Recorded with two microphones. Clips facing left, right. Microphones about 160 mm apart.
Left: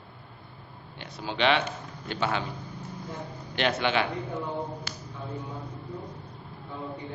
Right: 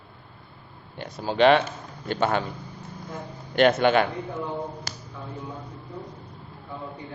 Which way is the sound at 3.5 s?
50° right (ahead or behind).